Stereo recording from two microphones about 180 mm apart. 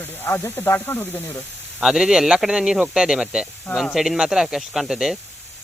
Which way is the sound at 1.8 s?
5° right (ahead or behind).